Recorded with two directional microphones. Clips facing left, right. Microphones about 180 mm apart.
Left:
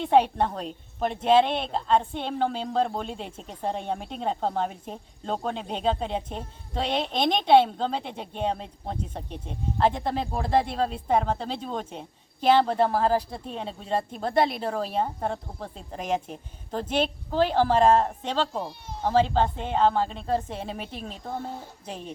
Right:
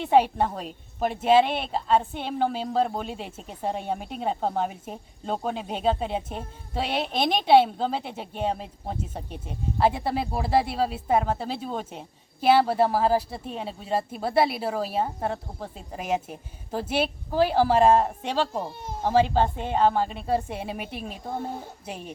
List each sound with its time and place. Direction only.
0.0 s a woman's voice: 5° right (ahead or behind)
18.7 s speech: 50° right (ahead or behind)
19.0 s a woman's voice: 10° right (ahead or behind)